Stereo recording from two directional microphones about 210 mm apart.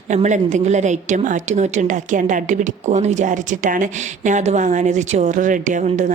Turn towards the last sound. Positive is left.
turn(degrees=-35)  # may be behind; listen again after turning